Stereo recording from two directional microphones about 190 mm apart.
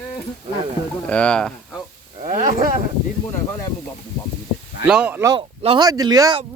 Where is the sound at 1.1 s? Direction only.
5° left (ahead or behind).